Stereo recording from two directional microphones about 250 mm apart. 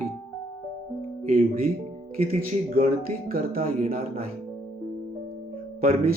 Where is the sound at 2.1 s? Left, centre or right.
Right.